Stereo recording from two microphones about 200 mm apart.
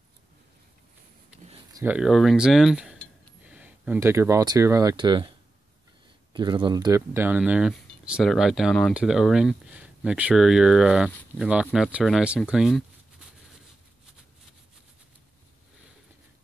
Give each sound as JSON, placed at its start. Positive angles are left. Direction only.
{"t": 1.7, "sound": "a sound", "side_deg": -15}
{"t": 2.0, "sound": "speech", "side_deg": 0}
{"t": 6.3, "sound": "speech", "side_deg": -25}